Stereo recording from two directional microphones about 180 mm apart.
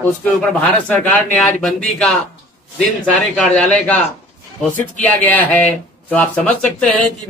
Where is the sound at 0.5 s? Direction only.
10° left (ahead or behind).